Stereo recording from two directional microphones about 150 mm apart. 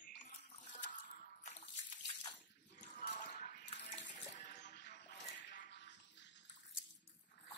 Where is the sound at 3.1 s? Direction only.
55° left (ahead or behind).